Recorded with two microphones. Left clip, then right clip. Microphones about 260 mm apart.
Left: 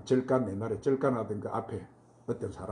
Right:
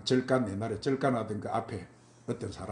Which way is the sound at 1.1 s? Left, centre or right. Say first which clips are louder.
Right 1 dB; right.